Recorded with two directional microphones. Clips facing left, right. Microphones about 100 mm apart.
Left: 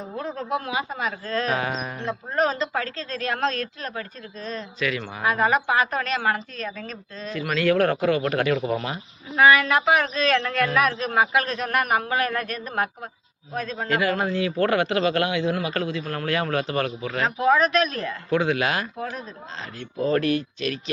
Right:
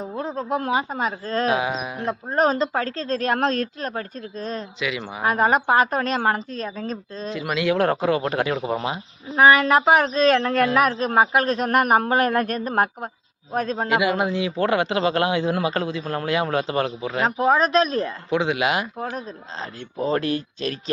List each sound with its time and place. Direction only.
0.2 s a woman's voice: 30° right (ahead or behind)
1.5 s a sound: 10° right (ahead or behind)
2.0 s a woman's voice: 40° right (ahead or behind)
4.8 s a sound: 15° right (ahead or behind)
5.2 s a woman's voice: 40° right (ahead or behind)
7.4 s a sound: 15° right (ahead or behind)
7.8 s a man's voice: 25° right (ahead or behind)
9.4 s a woman's voice: 35° right (ahead or behind)
13.8 s a man's voice: 15° right (ahead or behind)
17.2 s a woman's voice: 35° right (ahead or behind)
18.3 s a sound: 20° right (ahead or behind)
20.0 s a man's voice: 25° right (ahead or behind)